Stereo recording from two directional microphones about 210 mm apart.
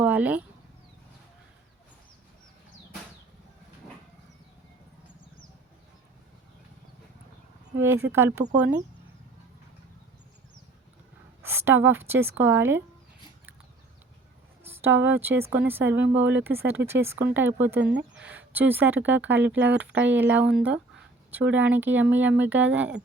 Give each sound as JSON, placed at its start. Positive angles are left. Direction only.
{"t": 0.0, "sound": "a sound", "side_deg": -5}
{"t": 8.1, "sound": "speech", "side_deg": -10}
{"t": 11.4, "sound": "speech", "side_deg": -10}
{"t": 14.6, "sound": "a sound", "side_deg": -10}
{"t": 15.0, "sound": "speech", "side_deg": -10}
{"t": 17.7, "sound": "speech", "side_deg": -55}
{"t": 18.3, "sound": "speech", "side_deg": -10}